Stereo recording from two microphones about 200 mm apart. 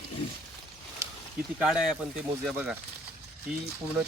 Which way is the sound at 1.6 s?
Centre (ahead or behind).